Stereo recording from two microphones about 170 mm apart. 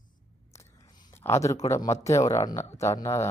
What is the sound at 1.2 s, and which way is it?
Speech, 15° left (ahead or behind).